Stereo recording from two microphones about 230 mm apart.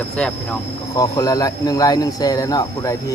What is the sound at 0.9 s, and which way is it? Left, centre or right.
Speech, centre.